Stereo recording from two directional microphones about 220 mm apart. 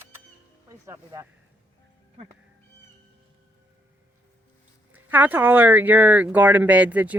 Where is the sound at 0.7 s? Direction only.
15° right (ahead or behind).